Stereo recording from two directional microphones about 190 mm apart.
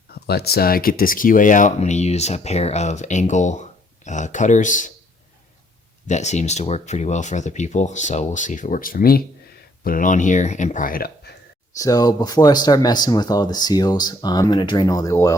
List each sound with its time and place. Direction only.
0.1 s speech: 55° left (ahead or behind)
6.1 s speech: 35° left (ahead or behind)
11.8 s speech: 20° left (ahead or behind)